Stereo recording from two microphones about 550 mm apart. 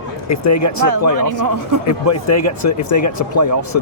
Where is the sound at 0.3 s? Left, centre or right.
Left.